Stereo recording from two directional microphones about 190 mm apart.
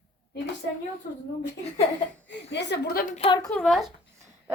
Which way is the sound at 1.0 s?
55° left (ahead or behind).